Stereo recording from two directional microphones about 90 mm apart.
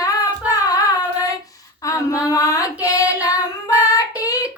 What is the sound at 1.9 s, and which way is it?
Female singing, 40° left (ahead or behind).